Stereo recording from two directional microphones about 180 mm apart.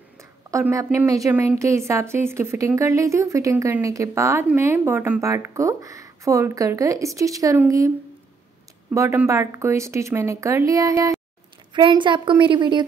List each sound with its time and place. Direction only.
0.2 s speech: 15° right (ahead or behind)
8.9 s a woman's voice: 15° right (ahead or behind)